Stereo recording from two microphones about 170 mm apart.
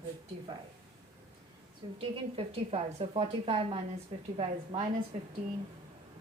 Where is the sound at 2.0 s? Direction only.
35° right (ahead or behind).